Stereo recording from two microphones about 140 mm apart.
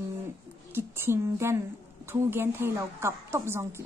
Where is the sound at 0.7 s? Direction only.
20° right (ahead or behind).